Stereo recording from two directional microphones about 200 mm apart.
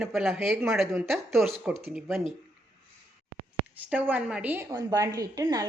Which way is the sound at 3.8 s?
5° right (ahead or behind).